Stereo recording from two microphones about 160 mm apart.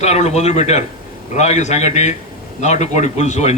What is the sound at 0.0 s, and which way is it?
A man's voice, 45° left (ahead or behind).